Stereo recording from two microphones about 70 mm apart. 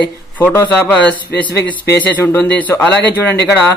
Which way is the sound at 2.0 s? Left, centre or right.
Left.